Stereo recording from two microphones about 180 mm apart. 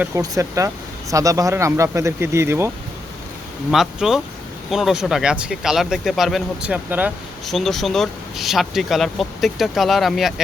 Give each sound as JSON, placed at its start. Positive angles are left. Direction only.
{"t": 0.2, "sound": "speech", "side_deg": -15}
{"t": 3.7, "sound": "speech", "side_deg": 0}